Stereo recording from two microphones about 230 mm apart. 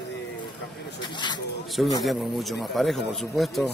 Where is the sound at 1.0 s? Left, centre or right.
Centre.